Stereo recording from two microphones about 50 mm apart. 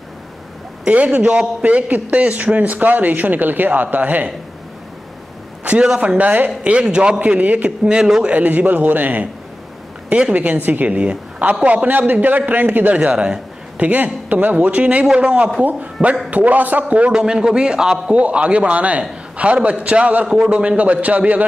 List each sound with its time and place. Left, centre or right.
0.8 s a man's voice: right
5.6 s a sound: right
5.9 s a man's voice: right
7.2 s a man's voice: right
7.9 s a man's voice: centre
8.3 s a man's voice: right
10.3 s a man's voice: right
10.9 s a woman's voice: right
12.9 s a man's voice: centre
17.1 s a man's voice: centre; by 21.5 s right